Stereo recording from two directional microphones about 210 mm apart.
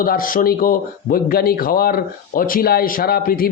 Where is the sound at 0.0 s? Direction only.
40° left (ahead or behind).